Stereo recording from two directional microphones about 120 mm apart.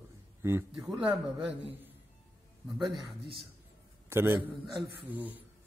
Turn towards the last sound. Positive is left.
turn(degrees=-15)  # may be behind; listen again after turning